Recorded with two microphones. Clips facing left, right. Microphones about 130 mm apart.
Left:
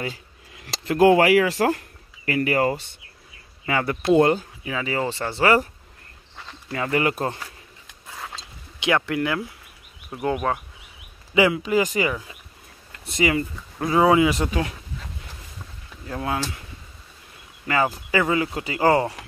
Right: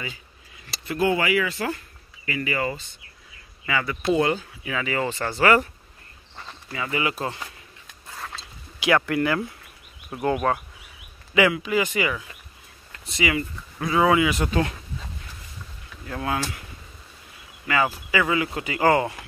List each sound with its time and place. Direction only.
0.6 s speech: 90° left
2.2 s speech: 60° left (ahead or behind)
3.6 s speech: 50° left (ahead or behind)
4.6 s speech: 25° left (ahead or behind)
6.7 s speech: 50° left (ahead or behind)
8.7 s a sound: 20° left (ahead or behind)
9.1 s speech: 10° left (ahead or behind)
11.3 s speech: 25° left (ahead or behind)
13.8 s speech: 30° left (ahead or behind)
14.5 s speech: 5° left (ahead or behind)
16.1 s speech: 20° left (ahead or behind)
17.7 s speech: 30° left (ahead or behind)